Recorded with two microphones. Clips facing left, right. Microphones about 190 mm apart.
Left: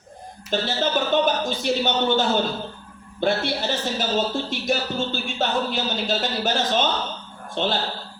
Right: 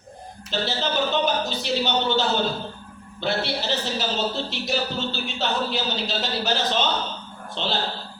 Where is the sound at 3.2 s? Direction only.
50° left (ahead or behind).